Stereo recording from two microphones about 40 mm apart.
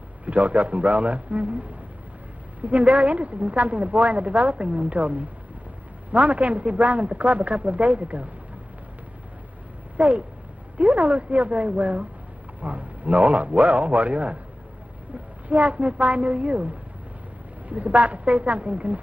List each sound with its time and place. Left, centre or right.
0.2 s a man's voice: right
9.9 s a man's voice: right
15.4 s a man's voice: right